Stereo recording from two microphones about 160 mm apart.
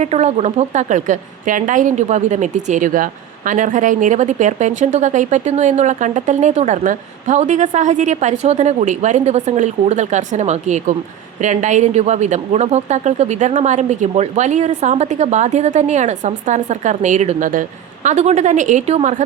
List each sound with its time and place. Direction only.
0.0 s a woman's voice: 45° right (ahead or behind)